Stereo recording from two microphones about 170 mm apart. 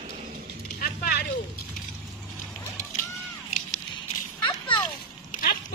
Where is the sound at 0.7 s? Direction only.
65° left (ahead or behind).